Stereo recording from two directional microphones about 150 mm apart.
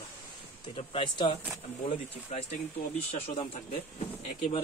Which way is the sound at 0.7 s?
35° left (ahead or behind).